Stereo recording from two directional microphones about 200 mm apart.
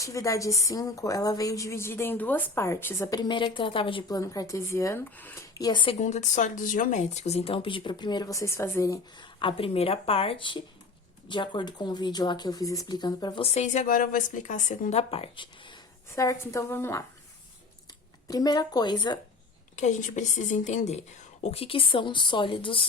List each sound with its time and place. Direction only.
0.0 s a woman's voice: 15° left (ahead or behind)
18.3 s speech: 20° left (ahead or behind)
19.7 s speech: 35° left (ahead or behind)